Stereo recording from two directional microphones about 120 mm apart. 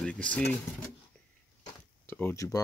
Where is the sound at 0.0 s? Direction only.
10° left (ahead or behind).